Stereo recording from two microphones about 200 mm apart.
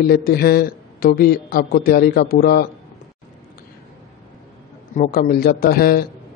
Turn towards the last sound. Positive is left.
turn(degrees=50)  # may be behind; listen again after turning